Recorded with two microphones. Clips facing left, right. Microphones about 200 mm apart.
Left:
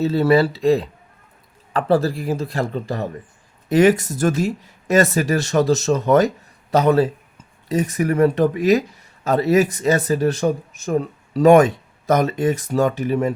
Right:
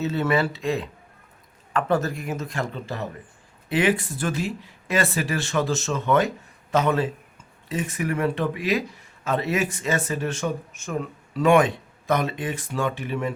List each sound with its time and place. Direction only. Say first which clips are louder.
0.0 s speech: left 7 dB; 35° left (ahead or behind)